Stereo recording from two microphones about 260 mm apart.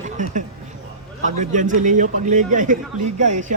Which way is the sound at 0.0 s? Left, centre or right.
Right.